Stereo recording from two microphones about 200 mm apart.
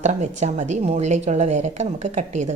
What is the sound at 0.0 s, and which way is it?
Speech, 35° right (ahead or behind).